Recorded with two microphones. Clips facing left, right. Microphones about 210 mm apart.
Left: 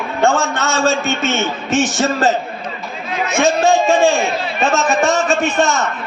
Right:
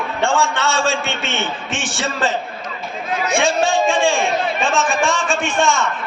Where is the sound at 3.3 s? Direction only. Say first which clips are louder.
Left 4 dB; 40° left (ahead or behind).